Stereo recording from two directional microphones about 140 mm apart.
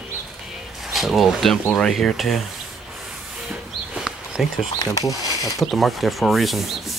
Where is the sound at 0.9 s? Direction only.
Centre (ahead or behind).